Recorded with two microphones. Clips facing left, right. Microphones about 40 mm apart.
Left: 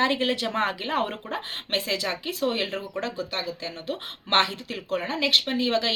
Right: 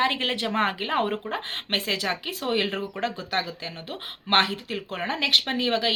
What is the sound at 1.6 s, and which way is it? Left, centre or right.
Speech, right.